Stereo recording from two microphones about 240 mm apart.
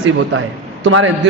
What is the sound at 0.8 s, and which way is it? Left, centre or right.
Speech, right.